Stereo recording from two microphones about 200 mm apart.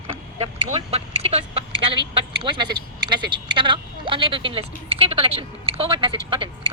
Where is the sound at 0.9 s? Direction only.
30° right (ahead or behind).